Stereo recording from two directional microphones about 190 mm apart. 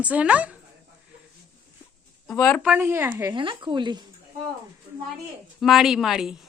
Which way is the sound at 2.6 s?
10° right (ahead or behind).